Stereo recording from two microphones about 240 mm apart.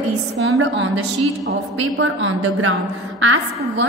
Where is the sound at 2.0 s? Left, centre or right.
Right.